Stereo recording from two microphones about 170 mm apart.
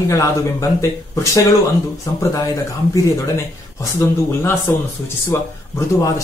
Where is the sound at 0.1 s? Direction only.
20° left (ahead or behind).